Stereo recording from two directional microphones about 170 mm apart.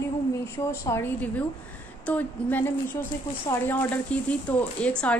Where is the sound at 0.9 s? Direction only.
20° left (ahead or behind).